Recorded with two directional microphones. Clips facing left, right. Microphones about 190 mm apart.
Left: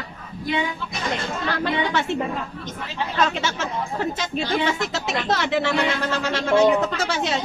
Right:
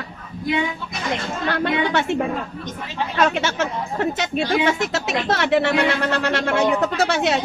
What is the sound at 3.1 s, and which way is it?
Speech, 60° right (ahead or behind).